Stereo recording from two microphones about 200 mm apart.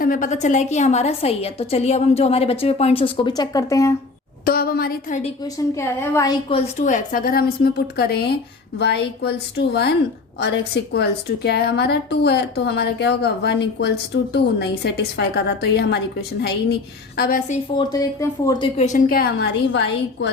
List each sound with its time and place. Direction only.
0.0 s a woman's voice: 40° left (ahead or behind); by 3.9 s 15° left (ahead or behind)
4.4 s a woman's voice: 50° left (ahead or behind)
5.7 s a woman's voice: 15° left (ahead or behind); by 16.6 s 55° left (ahead or behind)
17.2 s a woman's voice: 45° left (ahead or behind)
17.7 s speech: 20° left (ahead or behind)
18.8 s a woman's voice: 40° left (ahead or behind); by 20.3 s 60° left (ahead or behind)